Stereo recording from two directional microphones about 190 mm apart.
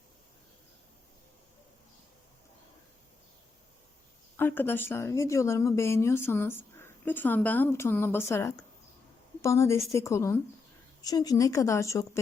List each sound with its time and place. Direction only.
4.4 s speech: 10° left (ahead or behind)